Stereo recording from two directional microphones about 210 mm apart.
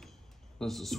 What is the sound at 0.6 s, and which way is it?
Speech, centre (ahead or behind).